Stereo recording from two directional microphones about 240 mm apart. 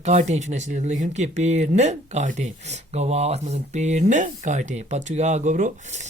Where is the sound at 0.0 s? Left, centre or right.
Right.